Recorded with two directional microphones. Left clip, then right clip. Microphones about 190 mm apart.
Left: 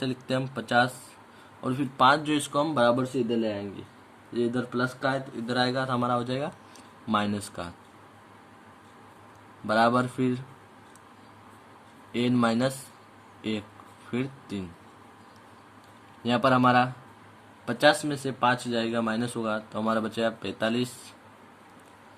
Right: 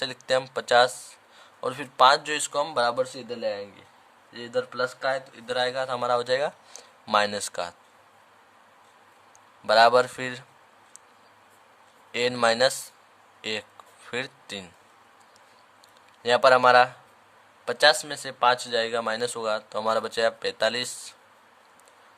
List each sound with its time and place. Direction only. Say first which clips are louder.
0.0 s speech: right 5 dB; 50° right (ahead or behind)
9.6 s speech: right 6 dB; 40° right (ahead or behind)
12.1 s speech: right 4 dB; 40° right (ahead or behind)
16.2 s speech: right 5 dB; 45° right (ahead or behind)